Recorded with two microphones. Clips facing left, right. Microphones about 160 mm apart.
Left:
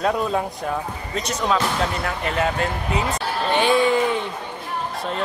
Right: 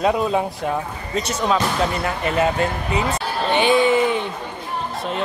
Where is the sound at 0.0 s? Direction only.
5° right (ahead or behind).